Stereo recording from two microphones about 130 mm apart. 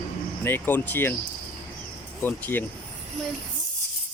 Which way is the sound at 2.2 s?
15° left (ahead or behind).